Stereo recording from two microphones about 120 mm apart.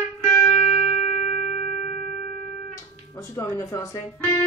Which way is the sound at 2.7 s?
25° left (ahead or behind).